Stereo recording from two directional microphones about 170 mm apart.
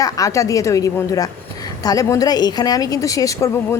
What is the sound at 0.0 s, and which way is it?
A woman's voice, 20° left (ahead or behind).